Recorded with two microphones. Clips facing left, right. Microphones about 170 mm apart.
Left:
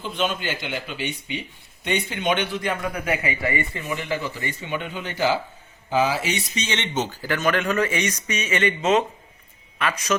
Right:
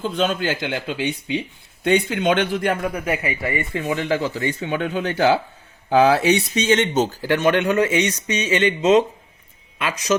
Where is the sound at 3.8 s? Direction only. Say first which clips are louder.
Right 6 dB; 90° right.